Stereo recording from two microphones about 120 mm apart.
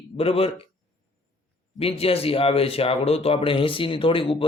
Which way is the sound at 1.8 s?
55° left (ahead or behind).